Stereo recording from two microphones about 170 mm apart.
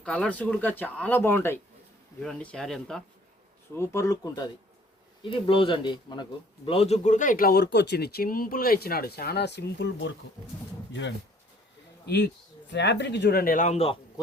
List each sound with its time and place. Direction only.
0.0 s speech: 5° left (ahead or behind)
3.8 s speech: 15° left (ahead or behind)
5.2 s speech: 30° left (ahead or behind); by 10.1 s 90° left
12.0 s speech: 90° left; by 13.9 s 40° left (ahead or behind)